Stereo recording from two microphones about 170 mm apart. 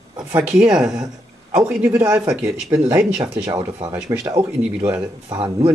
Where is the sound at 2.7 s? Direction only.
20° right (ahead or behind).